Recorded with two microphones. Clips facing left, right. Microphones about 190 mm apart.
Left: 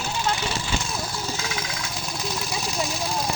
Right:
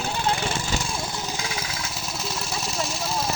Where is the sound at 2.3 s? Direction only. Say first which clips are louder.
Left 2 dB; centre (ahead or behind).